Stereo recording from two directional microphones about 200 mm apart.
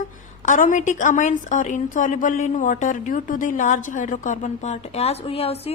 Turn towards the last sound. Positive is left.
turn(degrees=30)  # may be behind; listen again after turning